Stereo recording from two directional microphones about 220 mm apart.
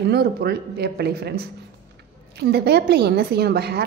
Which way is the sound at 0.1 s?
45° right (ahead or behind).